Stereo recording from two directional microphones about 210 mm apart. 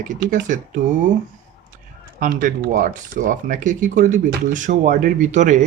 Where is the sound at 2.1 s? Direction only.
40° right (ahead or behind).